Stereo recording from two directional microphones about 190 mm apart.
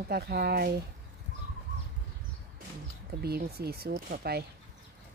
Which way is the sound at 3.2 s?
55° right (ahead or behind).